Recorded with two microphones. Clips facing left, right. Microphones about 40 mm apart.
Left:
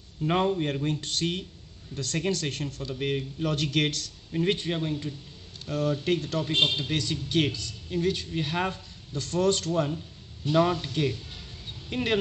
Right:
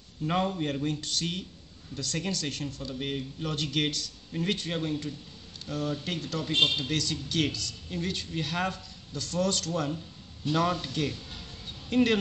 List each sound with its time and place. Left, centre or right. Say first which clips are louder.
0.2 s a man's voice: left 3 dB; left
0.8 s speech: left 2 dB; left
3.5 s speech: left 1 dB; left
4.3 s a man's voice: left 5 dB; left
4.7 s a man's voice: left 1 dB; centre
5.7 s speech: left 6 dB; left
6.4 s a man's voice: left 1 dB; centre
7.9 s a man's voice: left 6 dB; centre
8.5 s a man's voice: left 1 dB; centre
9.1 s speech: left 4 dB; left
10.5 s a man's voice: left 4 dB; centre